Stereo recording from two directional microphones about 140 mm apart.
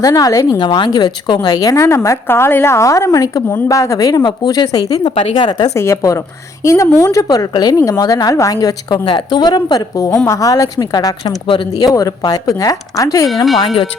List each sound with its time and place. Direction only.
0.0 s a woman's voice: 25° left (ahead or behind)
5.7 s a woman's voice: 20° left (ahead or behind); by 11.7 s 35° left (ahead or behind)
11.9 s a woman's voice: 25° left (ahead or behind)
13.2 s speech: centre (ahead or behind)